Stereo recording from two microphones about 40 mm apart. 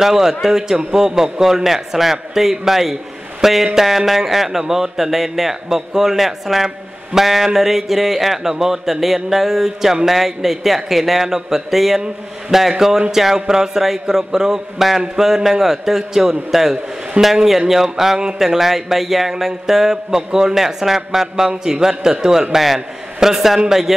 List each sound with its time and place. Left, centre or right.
0.0 s a man's voice: centre
17.2 s a man's voice: right
17.5 s a man's voice: centre